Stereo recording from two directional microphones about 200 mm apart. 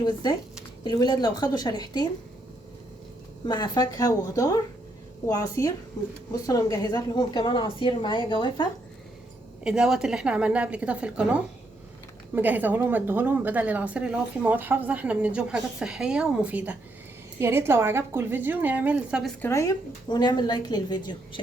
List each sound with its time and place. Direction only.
0.0 s a woman's voice: 20° left (ahead or behind)
3.4 s a woman's voice: 20° left (ahead or behind)
9.6 s a woman's voice: 5° right (ahead or behind)
19.4 s a woman's voice: 15° left (ahead or behind)